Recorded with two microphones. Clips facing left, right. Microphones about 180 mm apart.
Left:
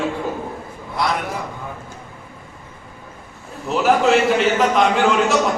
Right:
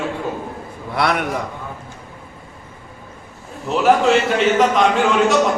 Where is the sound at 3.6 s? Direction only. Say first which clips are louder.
Right 1 dB; centre (ahead or behind).